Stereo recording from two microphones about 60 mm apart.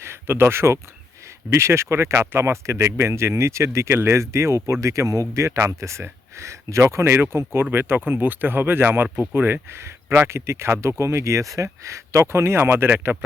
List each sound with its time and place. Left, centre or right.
0.0 s speech: right